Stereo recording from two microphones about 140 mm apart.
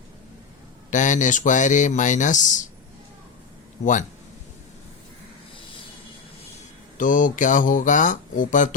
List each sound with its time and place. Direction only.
0.9 s speech: 65° left (ahead or behind)
6.9 s speech: 70° left (ahead or behind)